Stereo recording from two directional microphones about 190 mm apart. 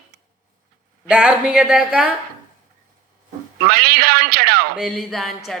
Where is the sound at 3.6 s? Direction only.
55° right (ahead or behind).